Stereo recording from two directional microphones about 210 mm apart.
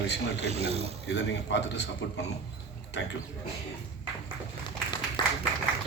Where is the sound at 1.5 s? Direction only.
55° left (ahead or behind).